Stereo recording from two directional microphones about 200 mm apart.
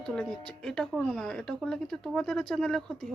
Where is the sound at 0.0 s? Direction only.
5° left (ahead or behind).